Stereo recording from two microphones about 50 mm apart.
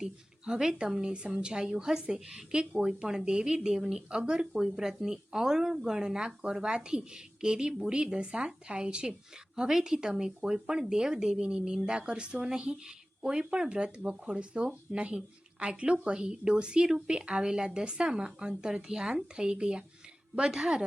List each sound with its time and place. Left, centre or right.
0.0 s speech: centre